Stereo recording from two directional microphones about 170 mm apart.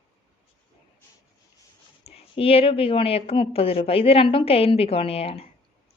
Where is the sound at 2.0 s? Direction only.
35° left (ahead or behind).